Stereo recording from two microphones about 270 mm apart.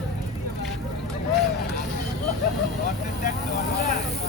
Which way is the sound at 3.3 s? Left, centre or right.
Left.